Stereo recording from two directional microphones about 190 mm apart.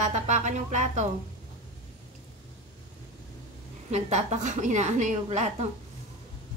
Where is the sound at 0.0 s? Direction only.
40° right (ahead or behind).